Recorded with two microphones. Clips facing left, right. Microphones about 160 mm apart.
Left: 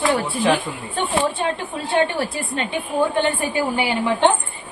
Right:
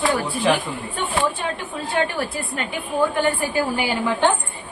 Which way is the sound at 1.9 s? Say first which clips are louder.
Left 3 dB; 25° left (ahead or behind).